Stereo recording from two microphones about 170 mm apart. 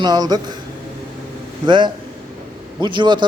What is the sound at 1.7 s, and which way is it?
Speech, 30° right (ahead or behind).